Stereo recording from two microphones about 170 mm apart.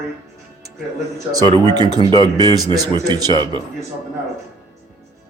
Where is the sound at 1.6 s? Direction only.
25° right (ahead or behind).